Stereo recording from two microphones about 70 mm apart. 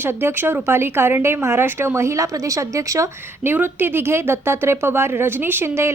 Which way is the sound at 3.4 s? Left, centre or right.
Right.